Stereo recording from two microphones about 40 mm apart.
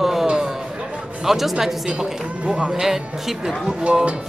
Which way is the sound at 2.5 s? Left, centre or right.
Right.